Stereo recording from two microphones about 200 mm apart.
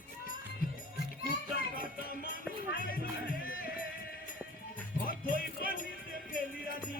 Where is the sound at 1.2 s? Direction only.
50° left (ahead or behind).